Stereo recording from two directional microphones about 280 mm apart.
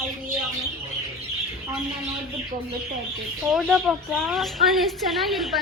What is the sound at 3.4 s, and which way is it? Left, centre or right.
Speech, centre.